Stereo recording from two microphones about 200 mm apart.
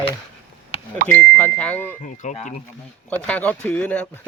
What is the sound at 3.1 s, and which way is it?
Speech, 10° left (ahead or behind).